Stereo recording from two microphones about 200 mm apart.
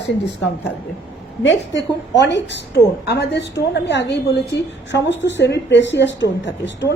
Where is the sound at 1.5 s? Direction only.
65° left (ahead or behind).